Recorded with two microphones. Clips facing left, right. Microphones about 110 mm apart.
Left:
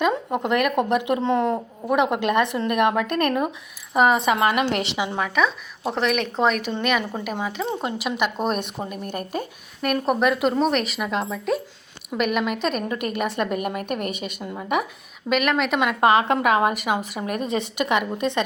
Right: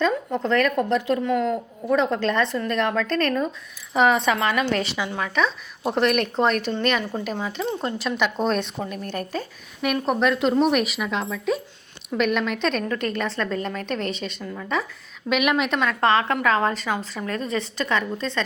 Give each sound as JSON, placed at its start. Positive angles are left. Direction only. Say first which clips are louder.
{"t": 0.4, "sound": "a woman's voice", "louder": "even", "side_deg": 15}
{"t": 3.9, "sound": "a woman's voice", "louder": "left 1 dB", "side_deg": 5}
{"t": 4.4, "sound": "speech", "louder": "left 2 dB", "side_deg": 20}
{"t": 5.3, "sound": "a woman's voice", "louder": "left 1 dB", "side_deg": 5}
{"t": 7.0, "sound": "a woman's voice", "louder": "even", "side_deg": 15}
{"t": 9.8, "sound": "a woman's voice", "louder": "left 1 dB", "side_deg": 0}
{"t": 15.3, "sound": "a woman's voice", "louder": "even", "side_deg": 0}
{"t": 15.8, "sound": "a woman's voice", "louder": "left 5 dB", "side_deg": 15}